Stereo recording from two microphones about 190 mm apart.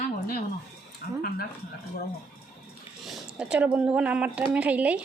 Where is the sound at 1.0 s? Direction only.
55° left (ahead or behind).